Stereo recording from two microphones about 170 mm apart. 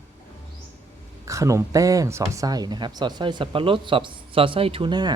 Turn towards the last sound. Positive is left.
turn(degrees=-25)  # may be behind; listen again after turning